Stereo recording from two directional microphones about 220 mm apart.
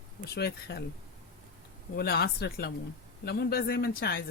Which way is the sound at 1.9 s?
45° left (ahead or behind).